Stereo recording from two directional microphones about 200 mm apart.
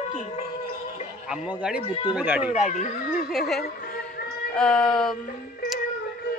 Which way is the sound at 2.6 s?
40° left (ahead or behind).